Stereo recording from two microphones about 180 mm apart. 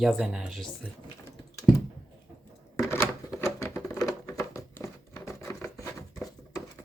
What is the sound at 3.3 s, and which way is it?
Patter, 15° left (ahead or behind).